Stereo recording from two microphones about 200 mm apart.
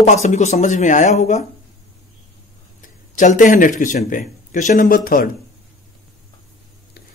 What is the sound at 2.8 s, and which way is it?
A man's voice, 40° left (ahead or behind).